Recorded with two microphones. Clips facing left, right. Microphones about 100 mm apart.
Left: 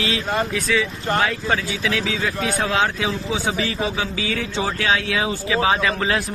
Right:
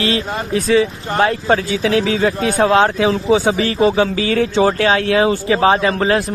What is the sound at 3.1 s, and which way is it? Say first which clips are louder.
Speech: right 10 dB; 90° right.